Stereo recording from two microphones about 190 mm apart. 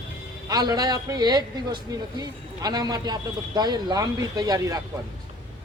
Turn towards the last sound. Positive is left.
turn(degrees=-20)  # may be behind; listen again after turning